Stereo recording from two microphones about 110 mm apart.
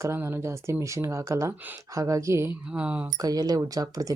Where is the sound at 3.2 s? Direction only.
35° right (ahead or behind).